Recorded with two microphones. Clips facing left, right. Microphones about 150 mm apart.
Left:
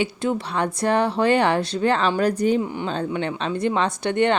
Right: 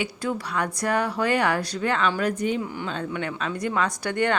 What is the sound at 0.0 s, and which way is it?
Speech, 25° left (ahead or behind).